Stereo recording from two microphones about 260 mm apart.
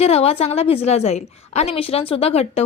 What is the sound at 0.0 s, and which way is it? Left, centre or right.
A woman's voice, left.